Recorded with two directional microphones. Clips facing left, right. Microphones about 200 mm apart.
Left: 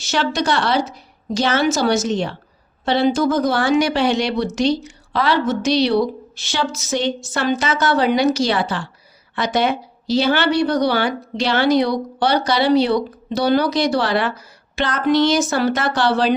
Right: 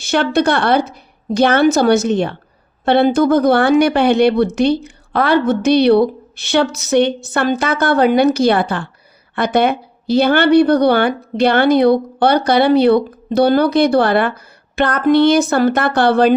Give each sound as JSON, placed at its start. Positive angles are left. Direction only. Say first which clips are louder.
{"t": 0.0, "sound": "speech", "louder": "right 6 dB", "side_deg": -55}